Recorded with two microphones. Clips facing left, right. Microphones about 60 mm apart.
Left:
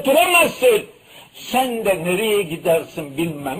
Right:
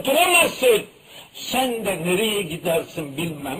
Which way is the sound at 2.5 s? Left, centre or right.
Left.